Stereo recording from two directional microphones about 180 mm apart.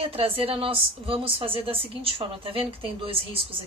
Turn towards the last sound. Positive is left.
turn(degrees=-30)  # may be behind; listen again after turning